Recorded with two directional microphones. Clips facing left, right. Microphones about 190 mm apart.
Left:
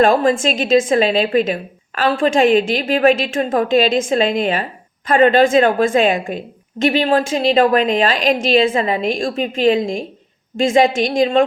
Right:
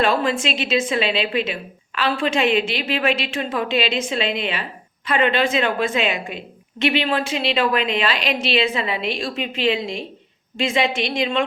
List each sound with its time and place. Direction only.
0.0 s a woman's voice: 45° left (ahead or behind)